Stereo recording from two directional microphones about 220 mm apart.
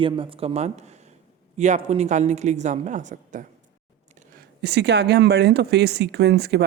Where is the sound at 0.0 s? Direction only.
25° right (ahead or behind).